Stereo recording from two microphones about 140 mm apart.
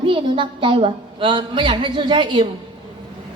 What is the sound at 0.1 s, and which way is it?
A woman's voice, 35° right (ahead or behind).